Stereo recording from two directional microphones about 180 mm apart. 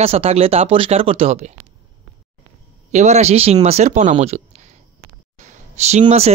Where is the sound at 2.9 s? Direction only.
40° right (ahead or behind).